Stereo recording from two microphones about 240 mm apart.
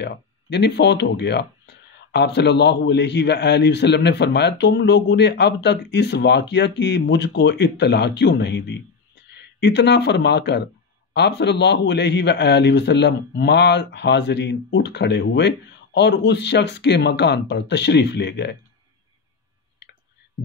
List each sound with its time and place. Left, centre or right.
0.0 s speech: left